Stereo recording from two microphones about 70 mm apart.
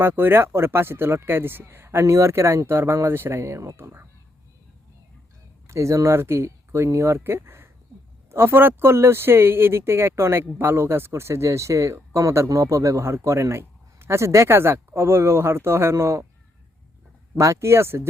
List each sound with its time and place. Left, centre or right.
0.0 s speech: right
5.6 s speech: right
17.3 s speech: right